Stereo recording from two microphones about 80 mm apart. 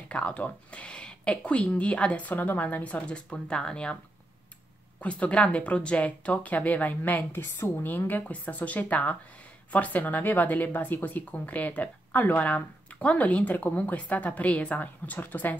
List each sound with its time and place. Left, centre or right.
0.1 s speech: centre
5.0 s speech: centre; by 7.8 s left
8.1 s speech: left